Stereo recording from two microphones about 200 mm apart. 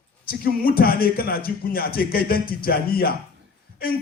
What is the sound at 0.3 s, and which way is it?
Speech, 45° left (ahead or behind).